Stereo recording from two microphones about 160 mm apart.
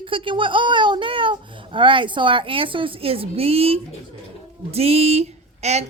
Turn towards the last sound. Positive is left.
turn(degrees=-45)  # may be behind; listen again after turning